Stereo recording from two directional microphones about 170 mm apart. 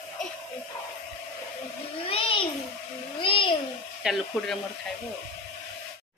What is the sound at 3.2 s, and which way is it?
Babbling, 30° left (ahead or behind).